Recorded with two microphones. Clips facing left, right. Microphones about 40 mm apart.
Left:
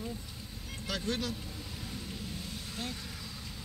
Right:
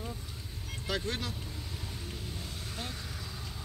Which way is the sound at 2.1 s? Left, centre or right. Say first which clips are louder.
Left 1 dB; right.